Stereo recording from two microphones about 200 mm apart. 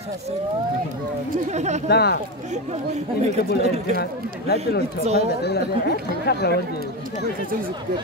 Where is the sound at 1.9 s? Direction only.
55° left (ahead or behind).